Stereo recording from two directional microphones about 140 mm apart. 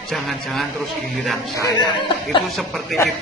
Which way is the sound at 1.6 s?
30° left (ahead or behind).